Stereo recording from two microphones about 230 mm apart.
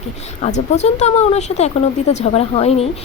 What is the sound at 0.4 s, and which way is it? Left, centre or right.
A woman's voice, left.